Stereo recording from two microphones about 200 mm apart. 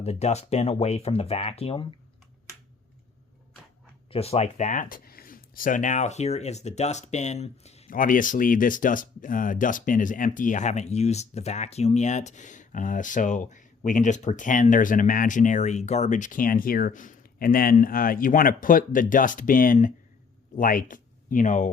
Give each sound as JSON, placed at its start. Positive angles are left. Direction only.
{"t": 0.0, "sound": "speech", "side_deg": 35}
{"t": 4.1, "sound": "speech", "side_deg": 30}